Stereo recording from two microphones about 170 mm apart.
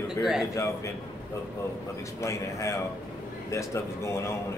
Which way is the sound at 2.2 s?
15° left (ahead or behind).